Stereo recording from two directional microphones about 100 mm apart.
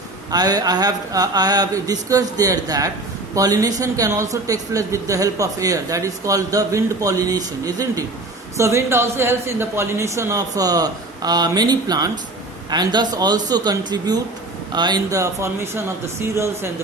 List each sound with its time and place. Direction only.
0.3 s a woman's voice: 40° right (ahead or behind)